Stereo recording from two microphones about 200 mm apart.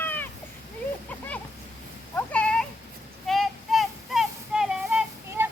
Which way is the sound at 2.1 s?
5° left (ahead or behind).